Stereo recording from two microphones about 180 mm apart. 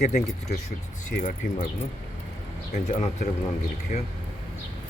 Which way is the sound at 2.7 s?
40° left (ahead or behind).